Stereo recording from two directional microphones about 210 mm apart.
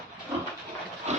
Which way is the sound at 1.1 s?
30° right (ahead or behind).